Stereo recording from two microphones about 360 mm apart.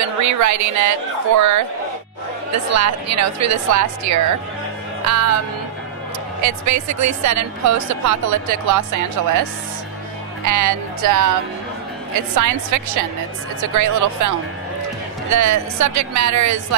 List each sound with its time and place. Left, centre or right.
0.0 s a woman's voice: right
2.7 s a woman's voice: right
6.4 s a woman's voice: right
10.4 s speech: right
12.4 s a woman's voice: right